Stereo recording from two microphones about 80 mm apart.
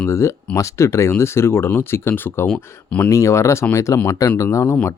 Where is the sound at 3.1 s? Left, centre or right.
Left.